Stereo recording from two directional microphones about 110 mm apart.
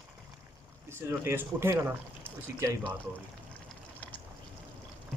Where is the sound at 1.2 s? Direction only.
20° right (ahead or behind).